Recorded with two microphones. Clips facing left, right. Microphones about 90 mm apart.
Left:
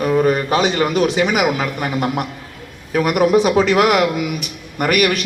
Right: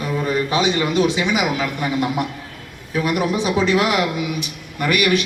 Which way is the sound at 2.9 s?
60° left (ahead or behind).